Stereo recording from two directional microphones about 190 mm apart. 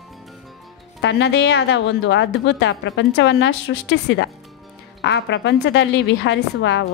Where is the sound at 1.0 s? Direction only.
65° left (ahead or behind).